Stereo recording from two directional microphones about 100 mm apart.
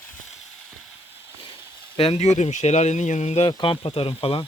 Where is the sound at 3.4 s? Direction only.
55° left (ahead or behind).